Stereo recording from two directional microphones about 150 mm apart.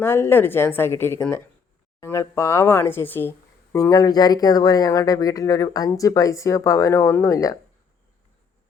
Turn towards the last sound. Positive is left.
turn(degrees=20)  # may be behind; listen again after turning